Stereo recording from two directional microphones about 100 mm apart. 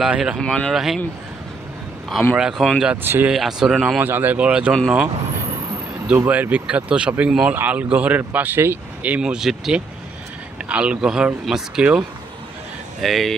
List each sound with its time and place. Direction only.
0.0 s speech: 10° right (ahead or behind)
0.4 s speech: 5° left (ahead or behind)
2.3 s speech: 5° right (ahead or behind)
3.0 s speech: 20° right (ahead or behind)
3.3 s speech: 5° right (ahead or behind)
4.0 s speech: 20° right (ahead or behind)
6.1 s speech: 20° right (ahead or behind)
13.0 s speech: centre (ahead or behind)